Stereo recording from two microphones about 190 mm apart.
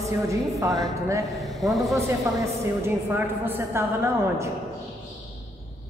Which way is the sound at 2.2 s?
15° right (ahead or behind).